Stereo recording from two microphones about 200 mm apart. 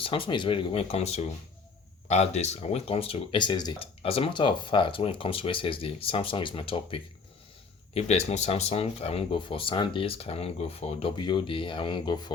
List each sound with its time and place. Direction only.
0.0 s speech: 25° left (ahead or behind)